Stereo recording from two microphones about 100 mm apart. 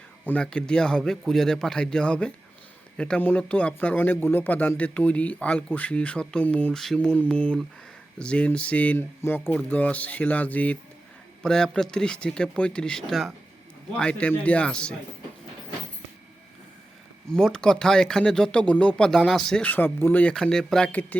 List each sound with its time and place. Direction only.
0.3 s speech: 10° left (ahead or behind)
17.3 s speech: 5° left (ahead or behind)
19.7 s speech: 20° left (ahead or behind)
20.3 s speech: 5° left (ahead or behind)